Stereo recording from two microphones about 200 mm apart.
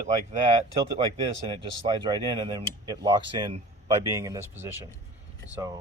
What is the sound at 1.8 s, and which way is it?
Speech, 20° right (ahead or behind).